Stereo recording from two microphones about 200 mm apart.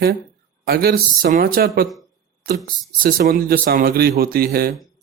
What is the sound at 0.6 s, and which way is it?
Speech, 50° right (ahead or behind).